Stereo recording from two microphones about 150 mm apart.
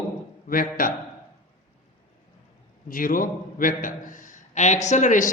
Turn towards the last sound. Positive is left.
turn(degrees=55)  # may be behind; listen again after turning